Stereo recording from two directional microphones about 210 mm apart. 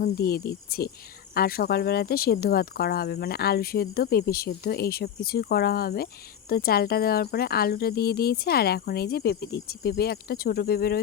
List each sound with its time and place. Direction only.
0.0 s speech: 45° left (ahead or behind)